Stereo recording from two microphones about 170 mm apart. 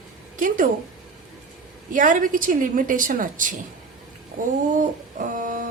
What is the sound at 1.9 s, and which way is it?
A woman's voice, 50° right (ahead or behind).